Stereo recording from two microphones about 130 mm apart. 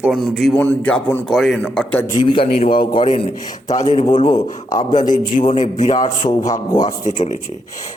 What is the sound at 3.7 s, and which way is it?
Speech, 55° left (ahead or behind).